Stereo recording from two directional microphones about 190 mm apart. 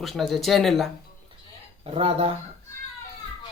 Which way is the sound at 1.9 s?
30° right (ahead or behind).